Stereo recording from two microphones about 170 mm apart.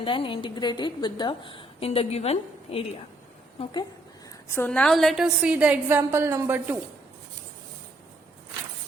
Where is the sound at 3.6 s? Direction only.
25° left (ahead or behind).